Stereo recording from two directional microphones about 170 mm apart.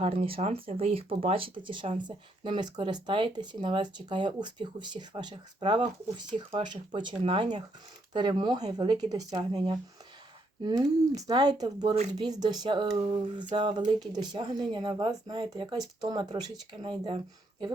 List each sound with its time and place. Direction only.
0.0 s speech: 35° right (ahead or behind)